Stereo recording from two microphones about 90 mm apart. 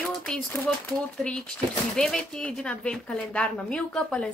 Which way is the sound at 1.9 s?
5° left (ahead or behind).